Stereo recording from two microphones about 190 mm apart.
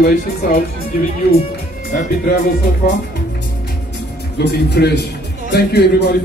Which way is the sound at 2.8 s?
60° left (ahead or behind).